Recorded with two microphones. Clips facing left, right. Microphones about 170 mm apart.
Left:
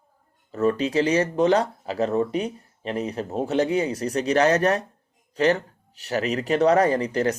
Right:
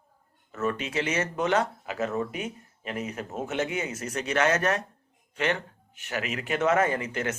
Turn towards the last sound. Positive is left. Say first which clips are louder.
# left 7 dB
turn(degrees=35)  # may be behind; listen again after turning